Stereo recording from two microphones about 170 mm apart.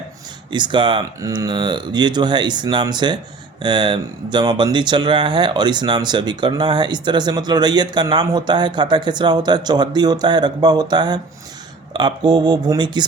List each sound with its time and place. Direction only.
0.5 s speech: 25° right (ahead or behind)